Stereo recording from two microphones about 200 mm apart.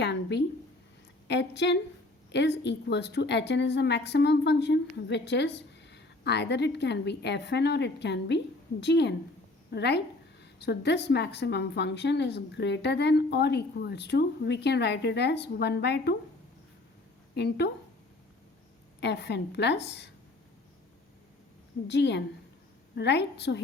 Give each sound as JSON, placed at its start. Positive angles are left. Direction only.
{"t": 0.0, "sound": "a woman's voice", "side_deg": 60}
{"t": 17.3, "sound": "a woman's voice", "side_deg": 55}
{"t": 18.9, "sound": "a woman's voice", "side_deg": 60}
{"t": 21.8, "sound": "a woman's voice", "side_deg": 60}